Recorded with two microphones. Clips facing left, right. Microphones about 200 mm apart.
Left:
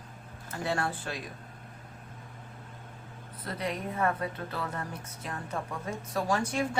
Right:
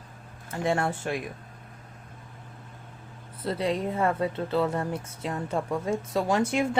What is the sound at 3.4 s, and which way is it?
A woman's voice, 30° right (ahead or behind).